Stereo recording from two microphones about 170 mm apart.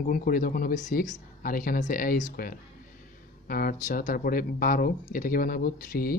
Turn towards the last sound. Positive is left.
turn(degrees=60)  # may be behind; listen again after turning